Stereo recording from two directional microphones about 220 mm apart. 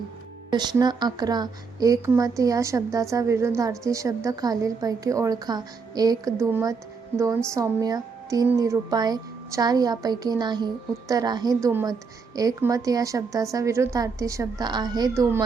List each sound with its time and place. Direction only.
0.5 s a woman's voice: 20° right (ahead or behind)